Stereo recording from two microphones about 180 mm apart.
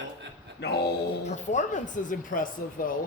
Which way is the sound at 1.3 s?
45° left (ahead or behind).